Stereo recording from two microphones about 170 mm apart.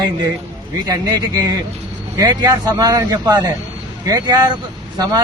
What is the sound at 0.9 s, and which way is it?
A man's voice, 25° right (ahead or behind).